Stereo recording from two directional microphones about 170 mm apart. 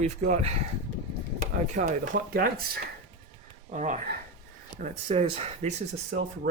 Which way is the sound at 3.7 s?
45° right (ahead or behind).